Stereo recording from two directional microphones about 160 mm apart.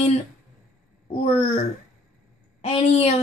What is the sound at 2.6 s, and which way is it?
Speech, 35° left (ahead or behind).